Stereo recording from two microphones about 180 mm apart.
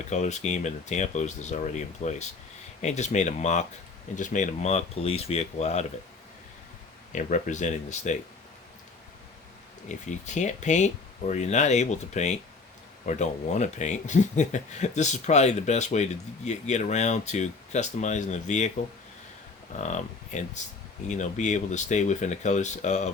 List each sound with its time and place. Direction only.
0.0 s speech: 40° left (ahead or behind)
7.1 s speech: 45° left (ahead or behind)
9.9 s speech: 40° left (ahead or behind)
19.7 s speech: 40° left (ahead or behind)